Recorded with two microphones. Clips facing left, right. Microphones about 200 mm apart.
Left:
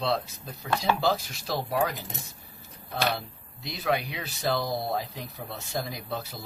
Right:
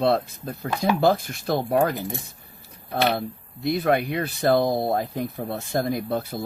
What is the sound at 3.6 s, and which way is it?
Speech, 55° right (ahead or behind).